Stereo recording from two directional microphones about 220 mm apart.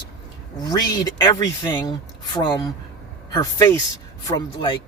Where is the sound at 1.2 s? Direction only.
20° left (ahead or behind).